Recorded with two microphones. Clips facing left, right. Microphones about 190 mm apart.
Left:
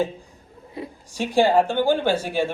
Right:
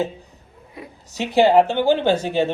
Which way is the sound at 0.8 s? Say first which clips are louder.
Left 5 dB; 30° left (ahead or behind).